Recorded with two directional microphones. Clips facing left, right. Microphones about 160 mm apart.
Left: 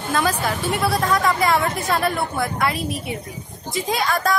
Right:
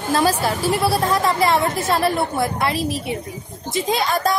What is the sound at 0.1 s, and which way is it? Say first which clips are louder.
A woman's voice: right 3 dB; 35° right (ahead or behind).